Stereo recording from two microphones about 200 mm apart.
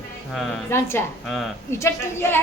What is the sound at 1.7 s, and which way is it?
Speech, 10° left (ahead or behind).